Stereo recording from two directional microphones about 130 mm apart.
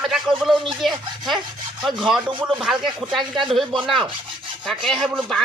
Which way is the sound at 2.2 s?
40° right (ahead or behind).